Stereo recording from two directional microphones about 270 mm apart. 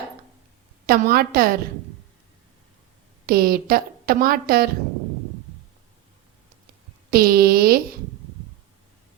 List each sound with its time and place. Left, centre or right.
0.9 s a woman's voice: right
3.2 s a woman's voice: right
7.1 s a woman's voice: right